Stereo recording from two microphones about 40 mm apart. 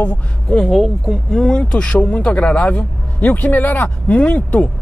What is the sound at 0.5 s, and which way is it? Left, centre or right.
Speech, left.